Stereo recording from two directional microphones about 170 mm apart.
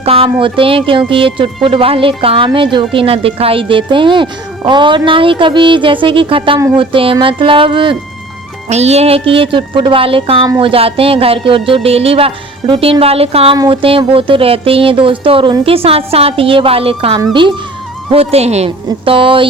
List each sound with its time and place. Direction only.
0.0 s a woman's voice: 35° right (ahead or behind)